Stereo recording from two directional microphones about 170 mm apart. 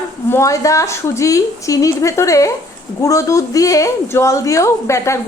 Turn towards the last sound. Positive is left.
turn(degrees=15)  # may be behind; listen again after turning